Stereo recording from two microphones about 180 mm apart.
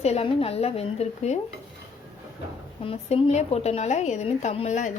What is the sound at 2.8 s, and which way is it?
A woman's voice, 30° left (ahead or behind).